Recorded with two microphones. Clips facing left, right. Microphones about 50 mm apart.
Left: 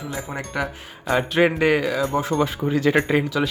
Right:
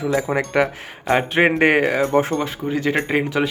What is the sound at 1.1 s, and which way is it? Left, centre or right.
Speech, right.